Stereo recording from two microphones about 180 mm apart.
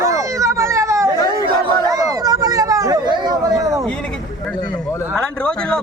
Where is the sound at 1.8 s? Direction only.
20° right (ahead or behind).